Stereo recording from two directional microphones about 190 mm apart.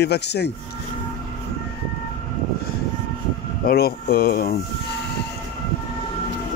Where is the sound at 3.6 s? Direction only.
55° left (ahead or behind).